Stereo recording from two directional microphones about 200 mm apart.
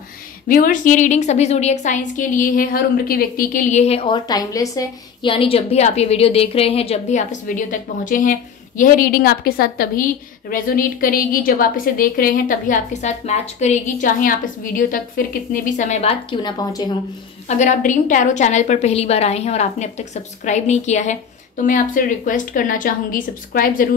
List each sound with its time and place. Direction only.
0.5 s a woman's voice: 40° left (ahead or behind); by 16.9 s 20° left (ahead or behind)
17.5 s a woman's voice: 40° left (ahead or behind)